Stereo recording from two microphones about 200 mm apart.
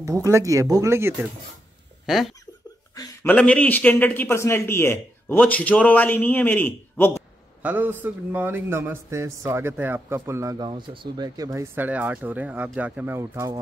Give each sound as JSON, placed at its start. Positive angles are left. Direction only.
{"t": 0.0, "sound": "a man's voice", "side_deg": -15}
{"t": 2.0, "sound": "speech", "side_deg": 0}
{"t": 2.9, "sound": "a sound", "side_deg": 15}
{"t": 3.3, "sound": "a man's voice", "side_deg": 5}
{"t": 7.6, "sound": "a man's voice", "side_deg": -10}